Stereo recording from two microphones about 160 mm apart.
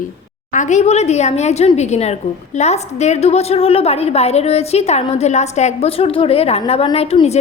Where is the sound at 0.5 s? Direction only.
50° left (ahead or behind).